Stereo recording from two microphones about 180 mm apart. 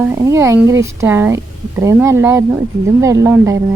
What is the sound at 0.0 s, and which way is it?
A woman's voice, 15° right (ahead or behind).